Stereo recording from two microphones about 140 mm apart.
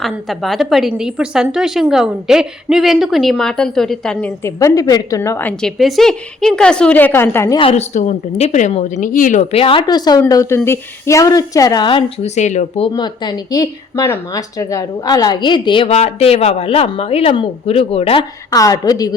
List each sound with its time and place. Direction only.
0.0 s a woman's voice: centre (ahead or behind)
4.4 s speech: 25° left (ahead or behind)
5.7 s a woman's voice: centre (ahead or behind); by 7.5 s 15° left (ahead or behind)
7.7 s a woman's voice: 55° left (ahead or behind); by 12.1 s 35° left (ahead or behind)
12.2 s speech: 55° left (ahead or behind)
12.9 s speech: 30° left (ahead or behind)
16.0 s speech: 50° left (ahead or behind)
18.5 s speech: 25° left (ahead or behind)